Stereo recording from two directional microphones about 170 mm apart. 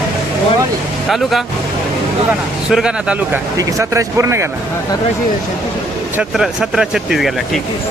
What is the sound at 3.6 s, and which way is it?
Speech, 20° right (ahead or behind).